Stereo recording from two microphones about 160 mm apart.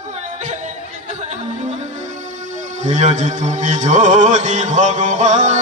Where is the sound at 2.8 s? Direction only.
45° right (ahead or behind).